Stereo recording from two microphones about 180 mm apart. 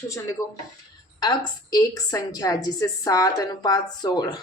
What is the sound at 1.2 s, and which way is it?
A woman's voice, 20° left (ahead or behind).